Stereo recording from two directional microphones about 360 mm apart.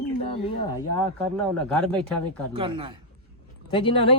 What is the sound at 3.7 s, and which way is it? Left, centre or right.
Speech, centre.